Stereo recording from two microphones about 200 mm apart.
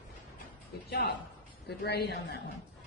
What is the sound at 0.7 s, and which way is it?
Speech, 55° left (ahead or behind).